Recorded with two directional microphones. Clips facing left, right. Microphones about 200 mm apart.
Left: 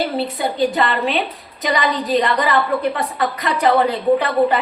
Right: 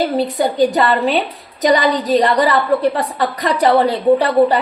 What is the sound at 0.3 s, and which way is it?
A woman's voice, 40° right (ahead or behind).